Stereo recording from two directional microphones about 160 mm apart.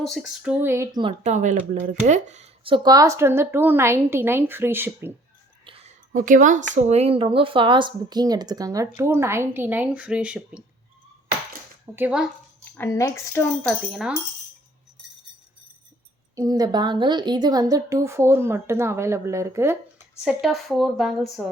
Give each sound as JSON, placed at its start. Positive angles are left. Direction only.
{"t": 0.0, "sound": "a woman's voice", "side_deg": 0}
{"t": 1.2, "sound": "speech", "side_deg": -50}
{"t": 2.7, "sound": "a woman's voice", "side_deg": -25}
{"t": 5.6, "sound": "a sound", "side_deg": -35}
{"t": 6.1, "sound": "a woman's voice", "side_deg": -55}
{"t": 11.9, "sound": "a woman's voice", "side_deg": -5}
{"t": 12.7, "sound": "speech", "side_deg": 15}
{"t": 13.7, "sound": "speech", "side_deg": 0}
{"t": 16.3, "sound": "a woman's voice", "side_deg": -20}
{"t": 20.2, "sound": "speech", "side_deg": 0}